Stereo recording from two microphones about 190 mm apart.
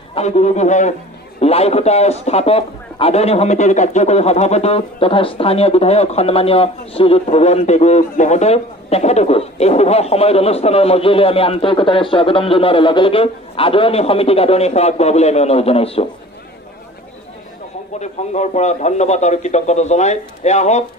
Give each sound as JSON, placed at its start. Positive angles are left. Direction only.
{"t": 0.1, "sound": "a man's voice", "side_deg": 35}
{"t": 17.9, "sound": "a man's voice", "side_deg": 35}